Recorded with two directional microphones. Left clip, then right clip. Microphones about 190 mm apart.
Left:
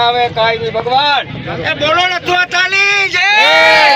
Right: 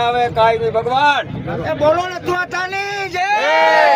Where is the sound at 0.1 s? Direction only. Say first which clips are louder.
Left 2 dB; 20° right (ahead or behind).